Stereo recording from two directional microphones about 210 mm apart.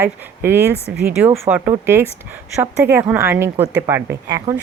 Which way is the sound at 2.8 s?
10° right (ahead or behind).